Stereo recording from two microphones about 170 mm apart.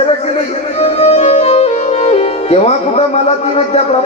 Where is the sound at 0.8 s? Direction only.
35° left (ahead or behind).